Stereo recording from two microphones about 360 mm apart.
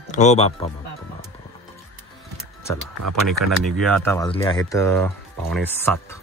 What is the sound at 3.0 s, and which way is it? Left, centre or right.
Speech, right.